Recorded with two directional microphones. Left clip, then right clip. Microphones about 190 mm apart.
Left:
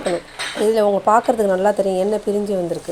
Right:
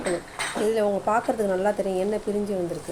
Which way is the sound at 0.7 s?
35° left (ahead or behind).